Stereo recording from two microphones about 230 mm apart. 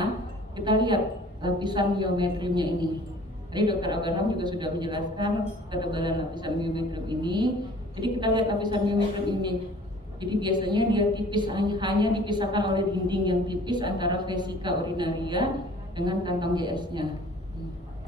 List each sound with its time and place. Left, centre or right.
0.6 s a woman's voice: centre